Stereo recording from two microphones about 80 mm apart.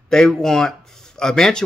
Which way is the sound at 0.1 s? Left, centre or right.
Centre.